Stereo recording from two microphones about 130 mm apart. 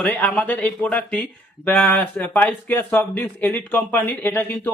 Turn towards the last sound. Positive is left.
turn(degrees=15)  # may be behind; listen again after turning